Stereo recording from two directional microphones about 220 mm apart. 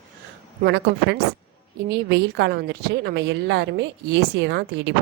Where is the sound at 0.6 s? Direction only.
50° right (ahead or behind).